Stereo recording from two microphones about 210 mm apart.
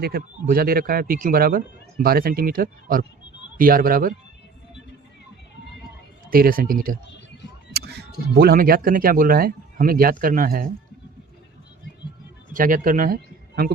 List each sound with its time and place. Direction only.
0.0 s speech: 45° right (ahead or behind)
6.3 s speech: 45° right (ahead or behind)
12.5 s speech: 40° right (ahead or behind)